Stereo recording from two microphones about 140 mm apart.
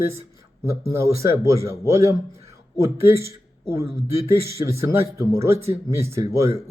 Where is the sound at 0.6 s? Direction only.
20° right (ahead or behind).